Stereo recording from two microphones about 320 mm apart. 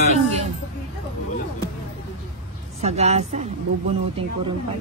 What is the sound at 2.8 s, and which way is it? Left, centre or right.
Speech, right.